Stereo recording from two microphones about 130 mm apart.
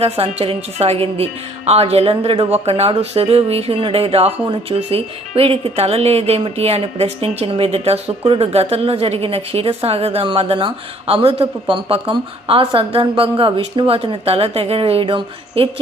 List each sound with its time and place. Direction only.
0.0 s speech: 45° right (ahead or behind)